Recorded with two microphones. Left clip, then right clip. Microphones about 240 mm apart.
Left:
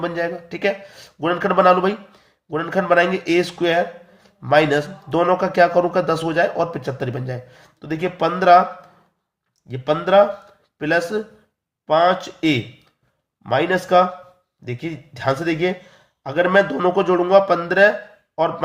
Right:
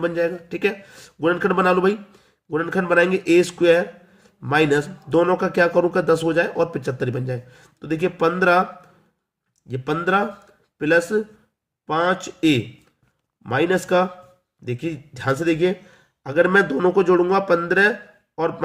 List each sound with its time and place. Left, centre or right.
0.0 s speech: centre
9.6 s speech: right
13.4 s speech: centre